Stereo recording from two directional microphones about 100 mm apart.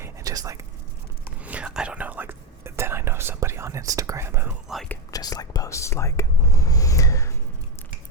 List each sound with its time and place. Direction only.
0.0 s whispering: 35° right (ahead or behind)
1.4 s whispering: 15° right (ahead or behind)
5.1 s whispering: 40° left (ahead or behind)